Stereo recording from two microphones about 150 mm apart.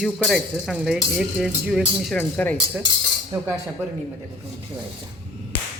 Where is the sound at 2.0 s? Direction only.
5° left (ahead or behind).